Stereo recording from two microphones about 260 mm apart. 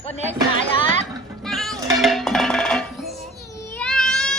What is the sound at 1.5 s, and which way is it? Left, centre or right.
Cowbell, centre.